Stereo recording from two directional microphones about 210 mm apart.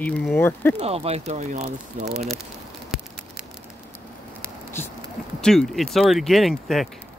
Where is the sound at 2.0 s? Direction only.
Centre (ahead or behind).